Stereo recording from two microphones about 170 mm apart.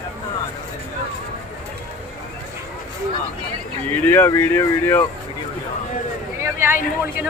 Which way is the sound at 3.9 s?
10° left (ahead or behind).